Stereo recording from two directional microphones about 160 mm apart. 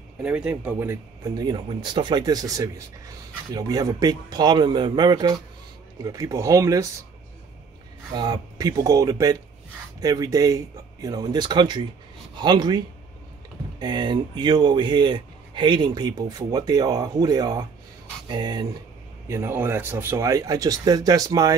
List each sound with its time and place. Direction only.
0.2 s speech: 10° right (ahead or behind)
8.1 s speech: 25° right (ahead or behind)
19.2 s speech: 15° right (ahead or behind)